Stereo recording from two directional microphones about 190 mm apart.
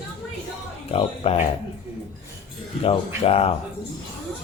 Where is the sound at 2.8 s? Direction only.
30° left (ahead or behind).